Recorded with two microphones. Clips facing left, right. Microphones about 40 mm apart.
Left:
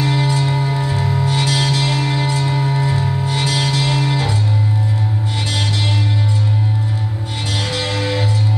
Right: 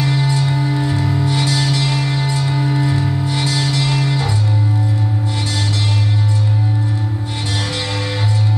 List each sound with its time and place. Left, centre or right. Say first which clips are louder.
0.0 s music: even; centre
1.2 s music: left 2 dB; left
3.0 s music: even; left